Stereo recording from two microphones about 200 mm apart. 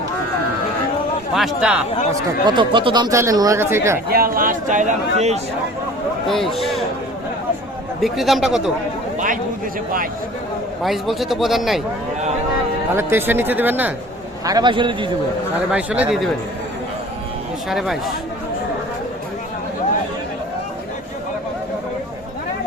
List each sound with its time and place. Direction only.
1.3 s a man's voice: centre (ahead or behind)
2.5 s speech: 25° right (ahead or behind)
4.1 s speech: 45° right (ahead or behind)
6.2 s a man's voice: centre (ahead or behind)
8.0 s a man's voice: centre (ahead or behind)
9.1 s speech: 40° right (ahead or behind)
10.8 s a man's voice: centre (ahead or behind)
12.9 s speech: 10° right (ahead or behind)
14.4 s a man's voice: 20° right (ahead or behind)
15.7 s a man's voice: 5° right (ahead or behind)
17.7 s a man's voice: centre (ahead or behind)